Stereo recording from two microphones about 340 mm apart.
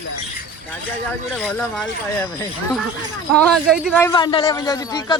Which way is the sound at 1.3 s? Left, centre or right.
Centre.